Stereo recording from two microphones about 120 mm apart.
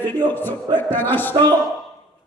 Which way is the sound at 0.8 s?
15° left (ahead or behind).